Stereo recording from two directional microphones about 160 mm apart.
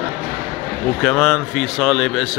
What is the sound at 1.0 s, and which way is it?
Speech, 5° left (ahead or behind).